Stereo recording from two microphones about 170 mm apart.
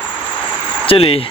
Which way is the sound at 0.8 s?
35° left (ahead or behind).